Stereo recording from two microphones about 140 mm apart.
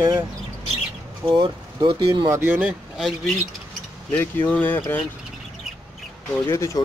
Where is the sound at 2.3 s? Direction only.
15° right (ahead or behind).